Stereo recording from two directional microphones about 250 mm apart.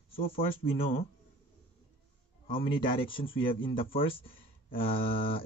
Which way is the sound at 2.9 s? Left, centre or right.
Left.